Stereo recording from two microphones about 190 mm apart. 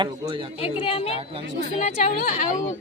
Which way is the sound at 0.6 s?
30° left (ahead or behind).